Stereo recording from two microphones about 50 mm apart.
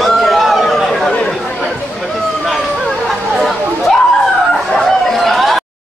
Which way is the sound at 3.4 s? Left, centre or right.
Centre.